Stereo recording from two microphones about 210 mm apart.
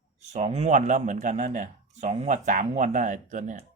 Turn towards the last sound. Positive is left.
turn(degrees=-35)  # may be behind; listen again after turning